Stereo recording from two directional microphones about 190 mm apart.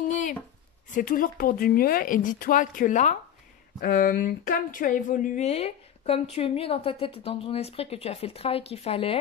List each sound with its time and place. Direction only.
0.9 s a woman's voice: 45° left (ahead or behind); by 9.2 s 30° left (ahead or behind)